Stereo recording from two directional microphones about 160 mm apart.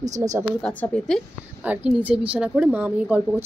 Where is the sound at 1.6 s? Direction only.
10° right (ahead or behind).